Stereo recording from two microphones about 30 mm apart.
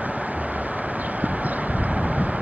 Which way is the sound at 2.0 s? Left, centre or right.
Right.